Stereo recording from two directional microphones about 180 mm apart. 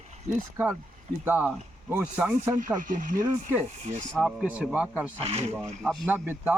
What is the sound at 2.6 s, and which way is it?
Speech, 45° right (ahead or behind).